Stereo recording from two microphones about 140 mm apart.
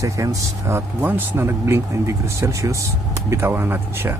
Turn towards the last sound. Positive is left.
turn(degrees=-15)  # may be behind; listen again after turning